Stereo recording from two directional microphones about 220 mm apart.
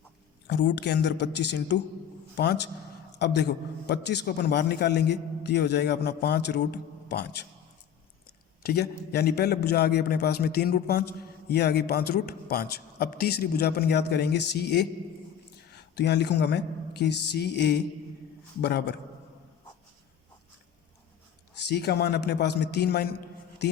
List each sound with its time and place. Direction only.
0.4 s a man's voice: 50° left (ahead or behind)
8.6 s a man's voice: 45° left (ahead or behind)
21.5 s a man's voice: 50° left (ahead or behind)